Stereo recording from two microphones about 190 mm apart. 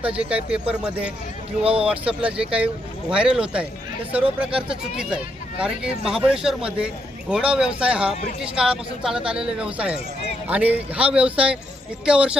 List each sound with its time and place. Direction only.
0.2 s speech: 5° right (ahead or behind)
1.6 s speech: 30° right (ahead or behind)
1.9 s speech: 5° right (ahead or behind)